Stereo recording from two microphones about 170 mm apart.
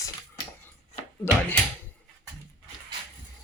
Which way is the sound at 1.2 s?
15° left (ahead or behind).